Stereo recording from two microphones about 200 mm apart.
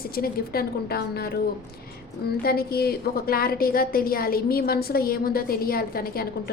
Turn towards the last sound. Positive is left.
turn(degrees=50)  # may be behind; listen again after turning